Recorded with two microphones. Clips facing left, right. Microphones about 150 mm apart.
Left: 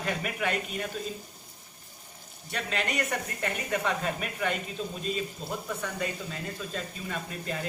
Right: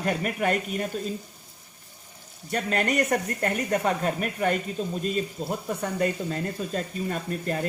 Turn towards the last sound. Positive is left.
turn(degrees=-45)  # may be behind; listen again after turning